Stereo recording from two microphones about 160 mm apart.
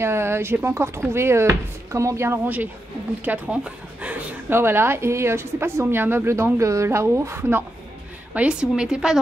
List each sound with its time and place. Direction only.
0.0 s a woman's voice: 15° right (ahead or behind)